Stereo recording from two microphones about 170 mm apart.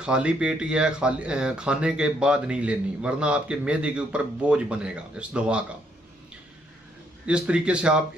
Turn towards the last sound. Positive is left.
turn(degrees=-5)  # may be behind; listen again after turning